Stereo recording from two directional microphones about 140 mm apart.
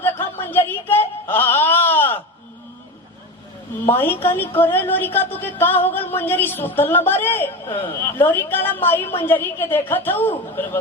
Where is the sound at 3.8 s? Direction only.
15° left (ahead or behind).